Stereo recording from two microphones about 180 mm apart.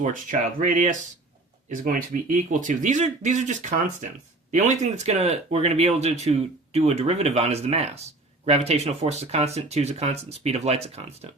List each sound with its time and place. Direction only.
0.0 s speech: 45° right (ahead or behind)